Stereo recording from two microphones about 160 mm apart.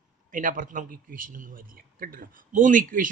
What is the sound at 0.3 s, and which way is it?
A man's voice, 55° right (ahead or behind).